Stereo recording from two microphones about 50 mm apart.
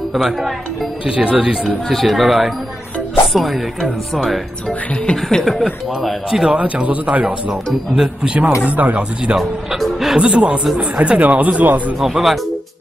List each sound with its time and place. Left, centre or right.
0.1 s speech: centre
1.0 s speech: right
1.9 s speech: centre
4.6 s speech: centre
5.4 s speech: centre
6.4 s speech: right
7.4 s speech: centre
8.6 s speech: right
9.4 s speech: centre
10.1 s speech: centre
12.0 s speech: centre